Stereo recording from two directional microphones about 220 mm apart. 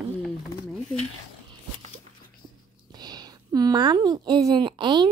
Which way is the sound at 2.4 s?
20° right (ahead or behind).